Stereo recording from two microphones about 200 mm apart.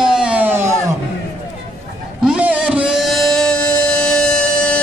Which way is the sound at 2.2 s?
5° right (ahead or behind).